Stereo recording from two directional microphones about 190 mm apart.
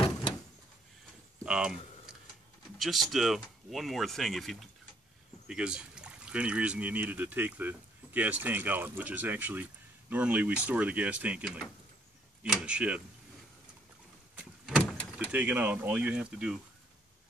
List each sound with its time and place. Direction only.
0.0 s door: 30° left (ahead or behind)
1.4 s speech: 5° right (ahead or behind)
2.8 s speech: centre (ahead or behind)
14.3 s power windows: 10° right (ahead or behind)
14.8 s vehicle: 10° left (ahead or behind)
15.1 s speech: 10° right (ahead or behind)